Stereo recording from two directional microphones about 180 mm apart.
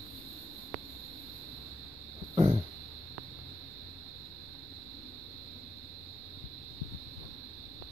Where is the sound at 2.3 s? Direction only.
30° right (ahead or behind).